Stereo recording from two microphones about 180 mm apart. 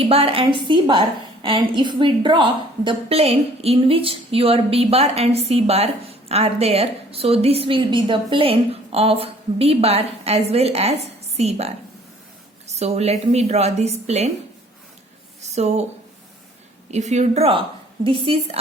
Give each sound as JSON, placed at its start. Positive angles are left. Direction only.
{"t": 0.1, "sound": "a woman's voice", "side_deg": -30}
{"t": 15.4, "sound": "a sound", "side_deg": -40}
{"t": 16.9, "sound": "a woman's voice", "side_deg": -40}